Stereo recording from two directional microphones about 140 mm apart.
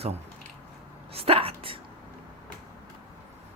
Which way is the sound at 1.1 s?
45° right (ahead or behind).